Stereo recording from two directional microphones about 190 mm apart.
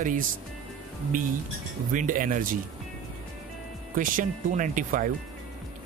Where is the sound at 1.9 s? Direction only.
45° right (ahead or behind).